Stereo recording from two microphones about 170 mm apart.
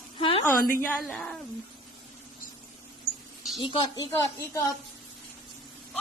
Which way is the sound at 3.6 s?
30° left (ahead or behind).